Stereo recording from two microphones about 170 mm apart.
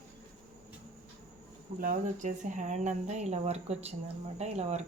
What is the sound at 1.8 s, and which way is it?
Speech, 50° right (ahead or behind).